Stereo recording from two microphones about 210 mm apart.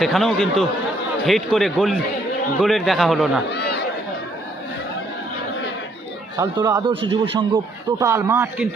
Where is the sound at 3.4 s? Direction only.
55° left (ahead or behind).